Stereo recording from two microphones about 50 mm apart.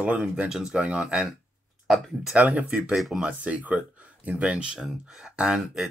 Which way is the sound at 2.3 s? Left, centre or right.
Right.